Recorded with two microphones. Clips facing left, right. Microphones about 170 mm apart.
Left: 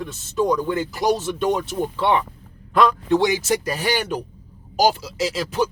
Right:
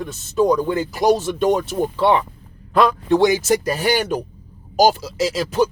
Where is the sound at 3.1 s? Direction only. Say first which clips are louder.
Right 3 dB; 45° right (ahead or behind).